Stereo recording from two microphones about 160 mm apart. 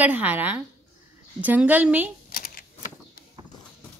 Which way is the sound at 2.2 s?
65° left (ahead or behind).